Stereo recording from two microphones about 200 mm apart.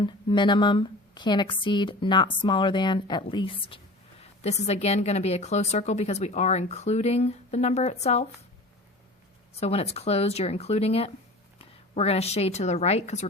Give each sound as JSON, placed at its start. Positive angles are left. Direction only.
{"t": 0.0, "sound": "a woman's voice", "side_deg": 25}
{"t": 9.6, "sound": "a woman's voice", "side_deg": 30}